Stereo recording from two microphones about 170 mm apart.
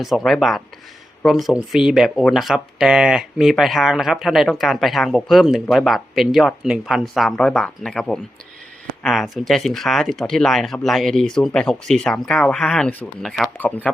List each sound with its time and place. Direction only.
0.3 s speech: centre (ahead or behind)